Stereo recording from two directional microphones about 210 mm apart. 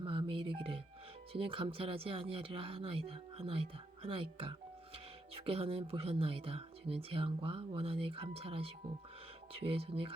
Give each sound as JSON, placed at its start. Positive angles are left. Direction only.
{"t": 0.0, "sound": "music", "side_deg": -25}
{"t": 1.3, "sound": "speech", "side_deg": -25}